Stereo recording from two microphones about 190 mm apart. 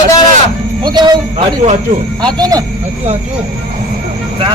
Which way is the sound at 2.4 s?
20° right (ahead or behind).